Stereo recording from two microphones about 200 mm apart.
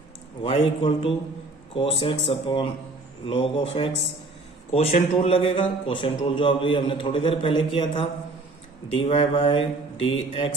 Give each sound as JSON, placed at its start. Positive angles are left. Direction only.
{"t": 0.4, "sound": "a man's voice", "side_deg": 30}